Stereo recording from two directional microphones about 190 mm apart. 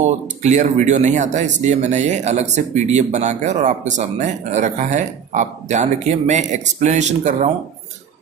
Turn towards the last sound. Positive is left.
turn(degrees=-35)  # may be behind; listen again after turning